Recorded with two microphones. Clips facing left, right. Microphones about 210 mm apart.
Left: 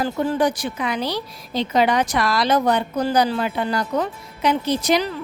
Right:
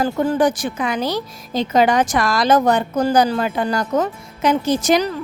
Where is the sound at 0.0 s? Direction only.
50° right (ahead or behind).